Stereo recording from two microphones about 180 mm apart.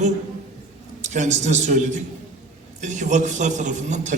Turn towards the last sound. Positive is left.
turn(degrees=-40)  # may be behind; listen again after turning